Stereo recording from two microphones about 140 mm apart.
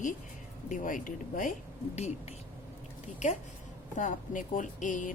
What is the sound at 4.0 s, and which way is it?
A woman's voice, 65° left (ahead or behind).